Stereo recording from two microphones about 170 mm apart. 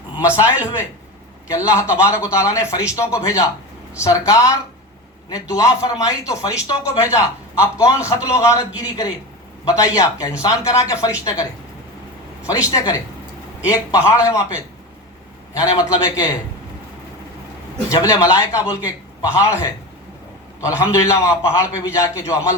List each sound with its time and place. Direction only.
0.3 s a man's voice: 10° right (ahead or behind)
1.5 s a man's voice: 15° left (ahead or behind)
12.7 s a man's voice: 20° left (ahead or behind)
15.5 s speech: 20° left (ahead or behind)
17.8 s a man's voice: 20° left (ahead or behind)